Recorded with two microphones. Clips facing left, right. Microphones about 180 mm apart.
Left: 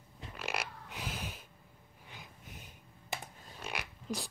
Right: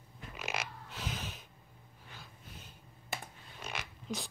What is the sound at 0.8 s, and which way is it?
Frog, 10° left (ahead or behind).